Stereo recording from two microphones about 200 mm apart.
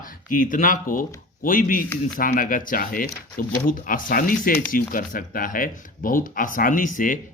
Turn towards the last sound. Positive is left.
turn(degrees=40)  # may be behind; listen again after turning